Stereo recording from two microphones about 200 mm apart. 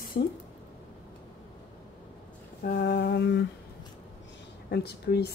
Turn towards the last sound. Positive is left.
turn(degrees=55)  # may be behind; listen again after turning